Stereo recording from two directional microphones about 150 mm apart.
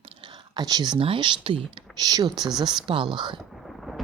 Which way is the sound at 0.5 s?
25° right (ahead or behind).